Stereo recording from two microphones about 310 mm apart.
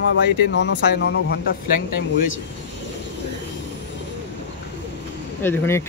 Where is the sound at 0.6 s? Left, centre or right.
Left.